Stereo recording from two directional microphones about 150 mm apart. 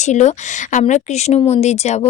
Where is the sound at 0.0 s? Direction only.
50° left (ahead or behind).